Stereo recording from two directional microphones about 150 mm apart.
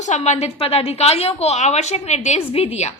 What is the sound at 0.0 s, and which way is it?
A woman's voice, 50° left (ahead or behind).